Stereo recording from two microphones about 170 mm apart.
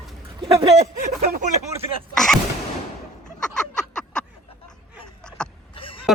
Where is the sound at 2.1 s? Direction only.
Centre (ahead or behind).